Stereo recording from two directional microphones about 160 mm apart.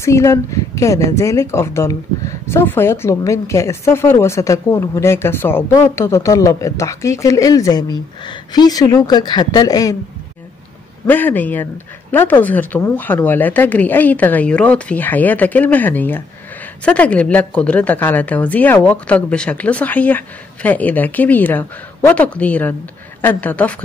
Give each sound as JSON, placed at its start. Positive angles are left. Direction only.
{"t": 0.0, "sound": "speech", "side_deg": 20}
{"t": 11.1, "sound": "a woman's voice", "side_deg": 10}